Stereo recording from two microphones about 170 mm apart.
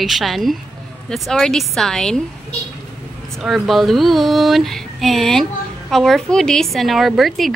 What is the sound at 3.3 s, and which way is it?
Female singing, centre (ahead or behind).